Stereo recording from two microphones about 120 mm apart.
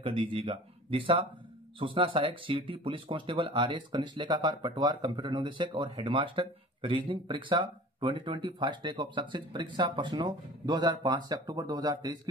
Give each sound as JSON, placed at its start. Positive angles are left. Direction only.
{"t": 0.0, "sound": "speech", "side_deg": -45}